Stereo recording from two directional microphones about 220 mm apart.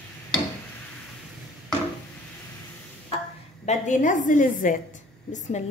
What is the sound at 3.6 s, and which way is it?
A woman's voice, 30° left (ahead or behind).